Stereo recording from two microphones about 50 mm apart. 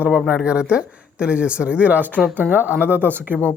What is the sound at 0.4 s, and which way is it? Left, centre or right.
A woman's voice, right.